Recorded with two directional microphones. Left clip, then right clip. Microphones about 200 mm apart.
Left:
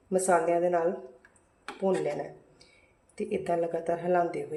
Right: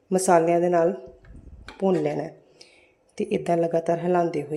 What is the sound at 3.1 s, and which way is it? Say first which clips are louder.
Speech: right 6 dB; 40° right (ahead or behind).